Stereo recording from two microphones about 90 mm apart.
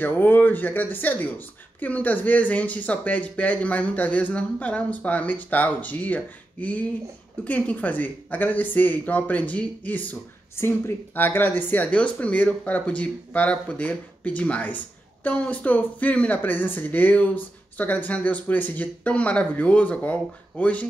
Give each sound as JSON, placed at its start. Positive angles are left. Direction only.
{"t": 0.0, "sound": "speech", "side_deg": 20}